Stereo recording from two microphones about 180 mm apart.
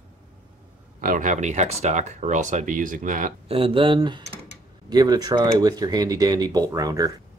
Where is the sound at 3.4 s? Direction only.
30° right (ahead or behind).